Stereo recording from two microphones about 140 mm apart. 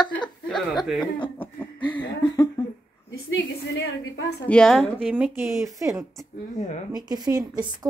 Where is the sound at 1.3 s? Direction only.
10° left (ahead or behind).